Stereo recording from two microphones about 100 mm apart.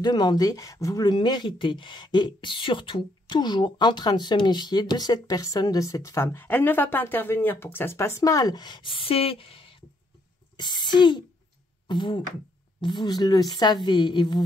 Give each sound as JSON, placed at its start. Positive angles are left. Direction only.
{"t": 0.0, "sound": "speech", "side_deg": 45}
{"t": 8.2, "sound": "a woman's voice", "side_deg": 35}
{"t": 10.6, "sound": "a woman's voice", "side_deg": 45}